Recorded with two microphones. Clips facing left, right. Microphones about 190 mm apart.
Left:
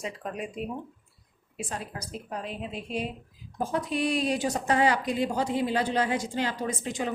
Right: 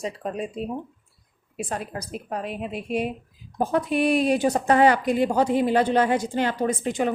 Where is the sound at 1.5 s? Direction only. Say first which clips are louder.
Right 6 dB; 60° right (ahead or behind).